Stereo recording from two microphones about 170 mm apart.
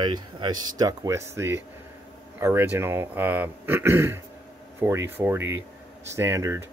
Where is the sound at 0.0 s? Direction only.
25° right (ahead or behind).